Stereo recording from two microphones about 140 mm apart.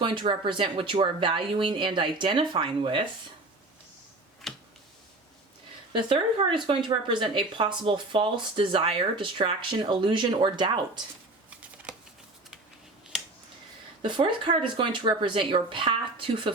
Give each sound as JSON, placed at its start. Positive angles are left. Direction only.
{"t": 0.0, "sound": "speech", "side_deg": -35}
{"t": 4.5, "sound": "finger snapping", "side_deg": 0}
{"t": 5.9, "sound": "speech", "side_deg": -35}
{"t": 14.0, "sound": "speech", "side_deg": -35}